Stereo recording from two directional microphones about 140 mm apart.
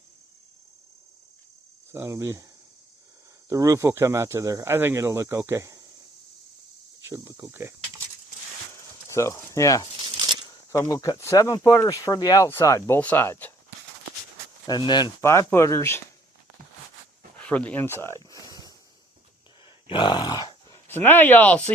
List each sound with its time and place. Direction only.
1.9 s speech: 20° right (ahead or behind)
3.5 s speech: 25° right (ahead or behind)
7.0 s speech: 20° right (ahead or behind)
9.1 s speech: 20° left (ahead or behind)
14.7 s speech: 30° left (ahead or behind)
15.2 s speech: 20° left (ahead or behind)
17.3 s a sound: 10° left (ahead or behind); by 18.7 s 25° left (ahead or behind)
19.9 s grunt: 35° left (ahead or behind)
20.8 s speech: 15° left (ahead or behind)